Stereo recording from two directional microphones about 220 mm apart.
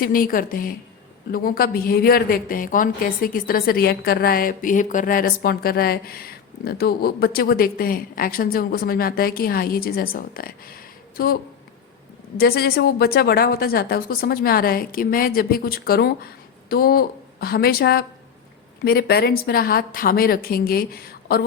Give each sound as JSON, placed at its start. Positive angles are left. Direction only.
{"t": 0.0, "sound": "a woman's voice", "side_deg": 40}
{"t": 12.4, "sound": "a woman's voice", "side_deg": 45}